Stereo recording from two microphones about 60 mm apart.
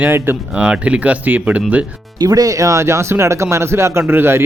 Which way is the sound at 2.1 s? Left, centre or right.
Right.